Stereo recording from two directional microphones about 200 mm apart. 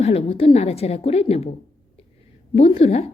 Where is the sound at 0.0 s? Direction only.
30° left (ahead or behind).